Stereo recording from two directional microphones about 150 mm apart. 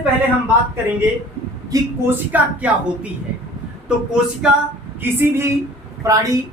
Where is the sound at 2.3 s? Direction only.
10° right (ahead or behind).